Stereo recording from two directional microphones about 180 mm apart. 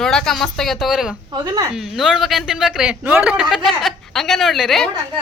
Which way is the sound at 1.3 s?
20° right (ahead or behind).